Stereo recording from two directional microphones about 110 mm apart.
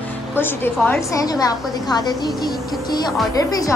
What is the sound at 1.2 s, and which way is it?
A woman's voice, 35° left (ahead or behind).